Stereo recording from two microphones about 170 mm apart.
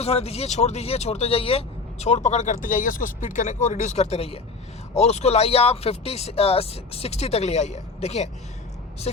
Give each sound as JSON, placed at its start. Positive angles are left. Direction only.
{"t": 0.0, "sound": "speech", "side_deg": 35}